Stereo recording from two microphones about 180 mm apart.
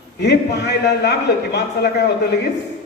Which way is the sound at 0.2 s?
70° left (ahead or behind).